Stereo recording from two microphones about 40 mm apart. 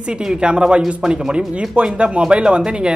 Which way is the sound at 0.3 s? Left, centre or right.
Right.